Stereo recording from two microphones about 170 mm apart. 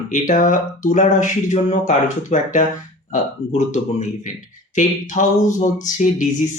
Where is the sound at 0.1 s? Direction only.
50° left (ahead or behind).